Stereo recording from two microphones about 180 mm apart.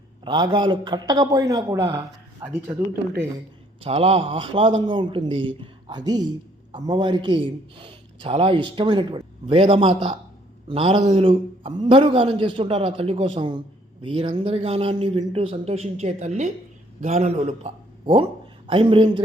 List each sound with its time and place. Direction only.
0.3 s a man's voice: 25° right (ahead or behind)
3.8 s a man's voice: 35° right (ahead or behind)